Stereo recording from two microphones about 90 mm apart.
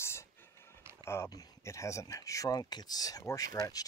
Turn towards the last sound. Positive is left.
turn(degrees=40)  # may be behind; listen again after turning